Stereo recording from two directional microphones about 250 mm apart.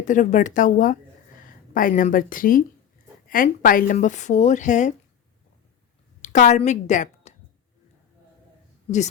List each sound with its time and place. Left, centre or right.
0.0 s a woman's voice: left
6.2 s a woman's voice: left